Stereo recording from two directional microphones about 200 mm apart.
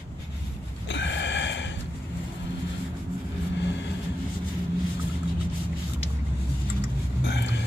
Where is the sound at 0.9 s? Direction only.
65° left (ahead or behind).